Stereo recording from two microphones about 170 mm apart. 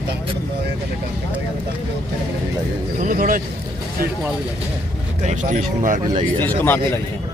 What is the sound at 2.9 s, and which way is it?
Speech, 55° right (ahead or behind).